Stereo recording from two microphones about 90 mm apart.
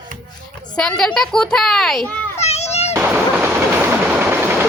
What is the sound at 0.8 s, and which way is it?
A woman's voice, 5° left (ahead or behind).